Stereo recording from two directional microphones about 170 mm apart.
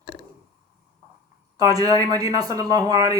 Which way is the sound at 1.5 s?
20° right (ahead or behind).